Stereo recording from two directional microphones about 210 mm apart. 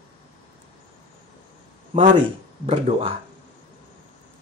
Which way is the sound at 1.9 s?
30° right (ahead or behind).